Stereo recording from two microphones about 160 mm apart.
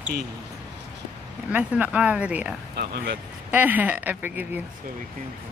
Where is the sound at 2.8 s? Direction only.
90° right.